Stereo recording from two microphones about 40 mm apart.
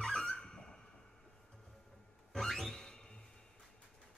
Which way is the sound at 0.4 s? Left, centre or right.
Centre.